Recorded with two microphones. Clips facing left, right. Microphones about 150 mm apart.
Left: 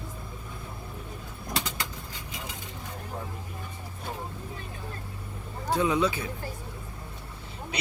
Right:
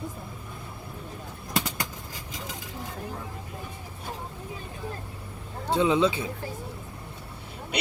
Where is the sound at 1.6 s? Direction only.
50° right (ahead or behind).